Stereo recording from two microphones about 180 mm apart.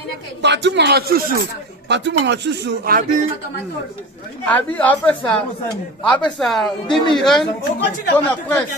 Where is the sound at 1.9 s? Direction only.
75° right (ahead or behind); by 3.2 s 55° right (ahead or behind).